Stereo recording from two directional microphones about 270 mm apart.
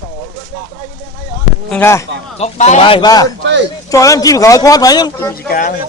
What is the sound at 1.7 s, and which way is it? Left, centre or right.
Speech, centre.